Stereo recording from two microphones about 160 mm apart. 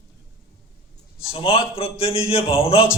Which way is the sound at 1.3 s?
35° left (ahead or behind).